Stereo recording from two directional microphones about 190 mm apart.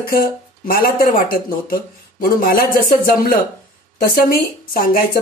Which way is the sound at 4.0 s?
50° left (ahead or behind).